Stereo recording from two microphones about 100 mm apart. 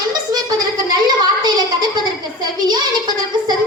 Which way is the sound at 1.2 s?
45° right (ahead or behind).